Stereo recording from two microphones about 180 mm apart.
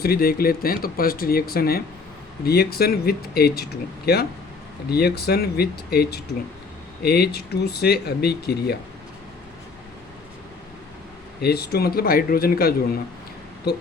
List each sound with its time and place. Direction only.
0.0 s speech: 55° left (ahead or behind)
11.3 s speech: 60° left (ahead or behind)